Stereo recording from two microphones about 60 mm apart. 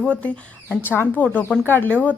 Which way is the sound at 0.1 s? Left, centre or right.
Left.